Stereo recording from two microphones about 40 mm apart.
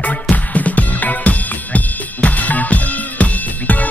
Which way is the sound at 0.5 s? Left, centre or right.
Left.